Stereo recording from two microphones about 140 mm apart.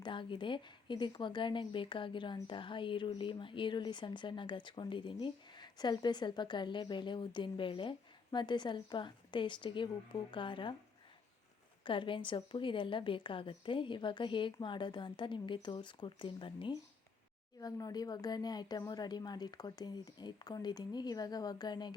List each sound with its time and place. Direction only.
0.0 s a woman's voice: 35° left (ahead or behind)
11.9 s a woman's voice: 35° left (ahead or behind)